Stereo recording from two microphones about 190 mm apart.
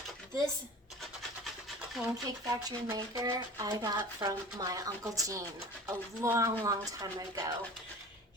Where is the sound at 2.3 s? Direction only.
20° right (ahead or behind).